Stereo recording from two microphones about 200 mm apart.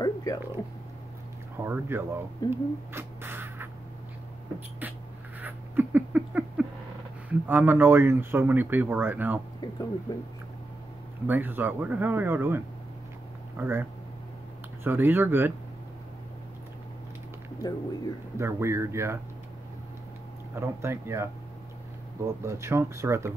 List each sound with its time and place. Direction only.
0.0 s a sound: 15° left (ahead or behind)
1.6 s speech: 10° right (ahead or behind)
2.5 s rodents: 10° right (ahead or behind)
5.4 s a sound: 10° right (ahead or behind)
7.2 s speech: 10° right (ahead or behind)
11.2 s speech: 10° right (ahead or behind)
17.6 s speech: 20° left (ahead or behind)
18.4 s speech: 15° right (ahead or behind)
20.5 s speech: 10° right (ahead or behind)